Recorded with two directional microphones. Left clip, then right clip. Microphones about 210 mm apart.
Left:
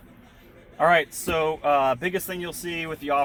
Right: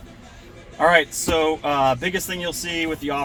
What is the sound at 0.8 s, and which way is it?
Speech, 35° left (ahead or behind).